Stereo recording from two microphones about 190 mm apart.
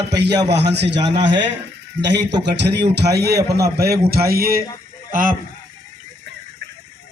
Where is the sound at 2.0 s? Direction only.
65° right (ahead or behind); by 5.3 s 45° right (ahead or behind).